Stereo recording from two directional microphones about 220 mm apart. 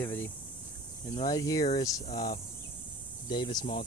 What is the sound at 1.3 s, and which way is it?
Speech, 15° left (ahead or behind).